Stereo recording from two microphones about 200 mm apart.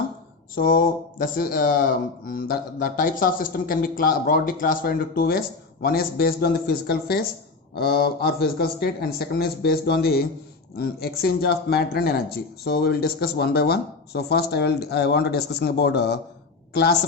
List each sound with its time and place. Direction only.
0.5 s speech: 45° left (ahead or behind)